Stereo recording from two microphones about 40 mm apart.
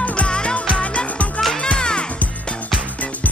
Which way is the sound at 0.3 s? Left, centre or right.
Left.